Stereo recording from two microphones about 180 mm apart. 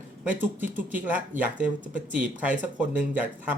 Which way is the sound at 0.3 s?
10° right (ahead or behind).